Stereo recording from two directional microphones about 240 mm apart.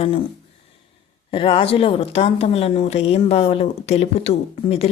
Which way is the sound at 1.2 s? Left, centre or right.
Left.